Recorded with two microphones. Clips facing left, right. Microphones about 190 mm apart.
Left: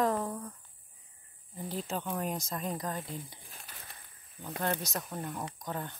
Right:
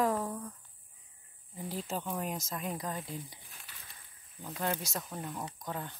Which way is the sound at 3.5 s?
45° left (ahead or behind).